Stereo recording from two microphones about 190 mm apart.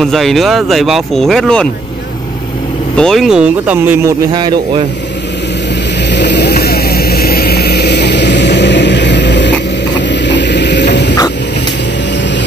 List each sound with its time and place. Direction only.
0.0 s speech: centre (ahead or behind)
3.0 s speech: centre (ahead or behind)
4.3 s speech: 25° right (ahead or behind)
6.0 s vehicle: 65° left (ahead or behind)